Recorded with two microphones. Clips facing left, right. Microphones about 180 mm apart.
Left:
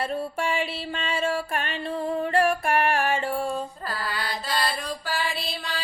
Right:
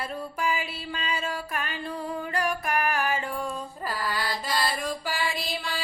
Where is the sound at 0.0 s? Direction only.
30° left (ahead or behind).